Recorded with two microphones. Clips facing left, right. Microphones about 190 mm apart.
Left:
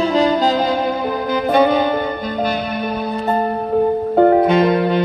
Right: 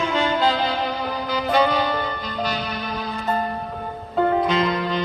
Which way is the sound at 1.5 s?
55° left (ahead or behind).